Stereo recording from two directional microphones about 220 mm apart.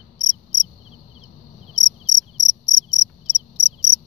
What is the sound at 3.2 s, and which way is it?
Cricket, 25° left (ahead or behind).